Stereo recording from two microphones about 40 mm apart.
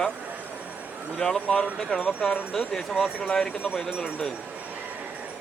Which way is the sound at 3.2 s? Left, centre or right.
Centre.